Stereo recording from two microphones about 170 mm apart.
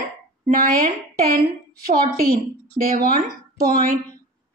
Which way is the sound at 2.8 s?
40° right (ahead or behind).